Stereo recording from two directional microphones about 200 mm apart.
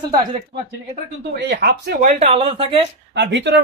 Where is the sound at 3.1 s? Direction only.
60° right (ahead or behind).